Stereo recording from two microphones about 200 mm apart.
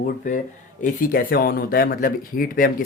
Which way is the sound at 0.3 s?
40° left (ahead or behind).